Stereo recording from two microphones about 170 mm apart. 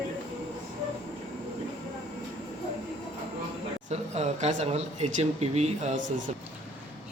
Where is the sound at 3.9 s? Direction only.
40° right (ahead or behind).